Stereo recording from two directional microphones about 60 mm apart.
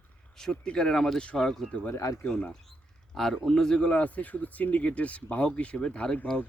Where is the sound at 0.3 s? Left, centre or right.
Centre.